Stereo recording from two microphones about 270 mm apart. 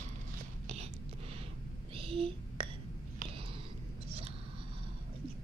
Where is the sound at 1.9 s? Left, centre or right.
Right.